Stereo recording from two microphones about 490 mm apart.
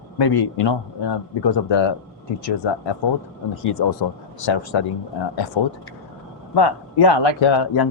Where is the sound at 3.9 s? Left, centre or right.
Left.